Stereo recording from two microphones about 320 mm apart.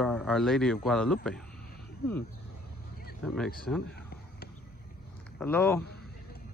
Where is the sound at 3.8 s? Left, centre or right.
Left.